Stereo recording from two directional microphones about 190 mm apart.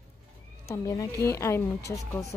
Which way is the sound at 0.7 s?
15° left (ahead or behind).